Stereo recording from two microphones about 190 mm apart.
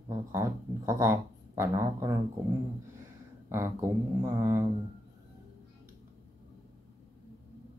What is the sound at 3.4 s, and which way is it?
Speech, 15° right (ahead or behind).